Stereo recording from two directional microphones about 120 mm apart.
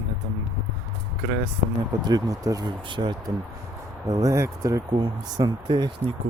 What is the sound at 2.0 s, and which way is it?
Speech, 30° right (ahead or behind).